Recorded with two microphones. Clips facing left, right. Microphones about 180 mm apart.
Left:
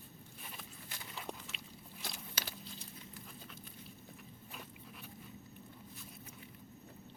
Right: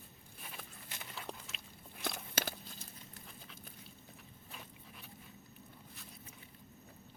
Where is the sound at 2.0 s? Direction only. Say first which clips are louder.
Right 7 dB; 55° right (ahead or behind).